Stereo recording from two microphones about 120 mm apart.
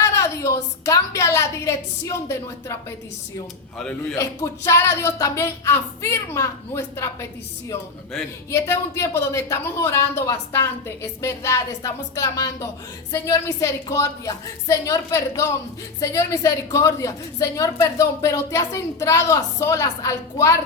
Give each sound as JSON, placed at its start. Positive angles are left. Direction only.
{"t": 0.0, "sound": "a woman's voice", "side_deg": 25}
{"t": 3.8, "sound": "speech", "side_deg": 10}
{"t": 4.2, "sound": "a woman's voice", "side_deg": 25}
{"t": 8.4, "sound": "a woman's voice", "side_deg": 25}